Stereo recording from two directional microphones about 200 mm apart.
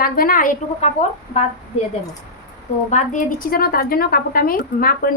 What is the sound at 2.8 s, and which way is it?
A woman's voice, 40° left (ahead or behind).